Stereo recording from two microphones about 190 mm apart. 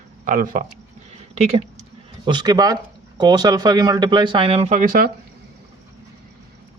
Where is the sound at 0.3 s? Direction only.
45° right (ahead or behind).